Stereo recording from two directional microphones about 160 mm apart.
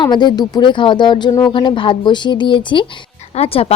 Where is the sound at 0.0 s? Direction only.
25° left (ahead or behind).